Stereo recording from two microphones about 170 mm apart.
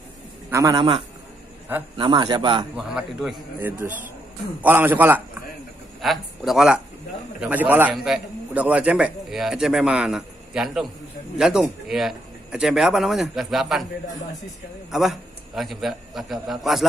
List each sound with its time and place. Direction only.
0.5 s a man's voice: 20° right (ahead or behind)
2.7 s a man's voice: 5° right (ahead or behind)
5.9 s a man's voice: centre (ahead or behind)
14.9 s a man's voice: centre (ahead or behind)